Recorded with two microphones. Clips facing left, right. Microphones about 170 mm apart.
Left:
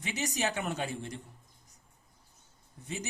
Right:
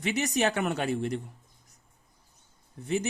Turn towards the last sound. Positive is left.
turn(degrees=-65)  # may be behind; listen again after turning